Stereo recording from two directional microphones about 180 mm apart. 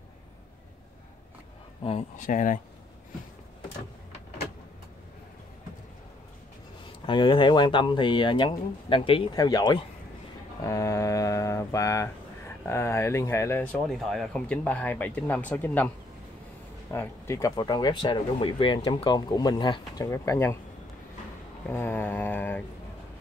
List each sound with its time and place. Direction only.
1.8 s speech: 35° left (ahead or behind)
7.1 s speech: 25° left (ahead or behind)
16.9 s speech: 15° left (ahead or behind)
21.6 s dog: 10° left (ahead or behind)